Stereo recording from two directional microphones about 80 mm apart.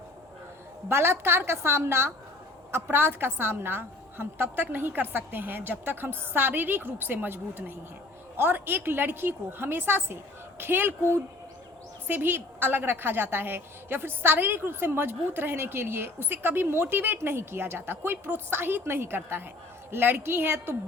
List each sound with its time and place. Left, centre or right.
0.9 s a woman's voice: right
12.0 s a woman's voice: right